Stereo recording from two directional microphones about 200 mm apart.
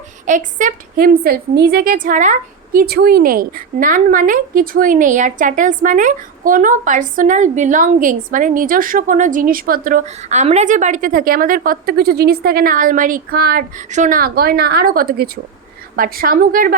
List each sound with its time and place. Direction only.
0.3 s a woman's voice: 40° right (ahead or behind)